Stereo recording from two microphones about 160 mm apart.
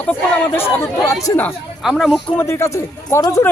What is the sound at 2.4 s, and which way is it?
Speech, 15° left (ahead or behind).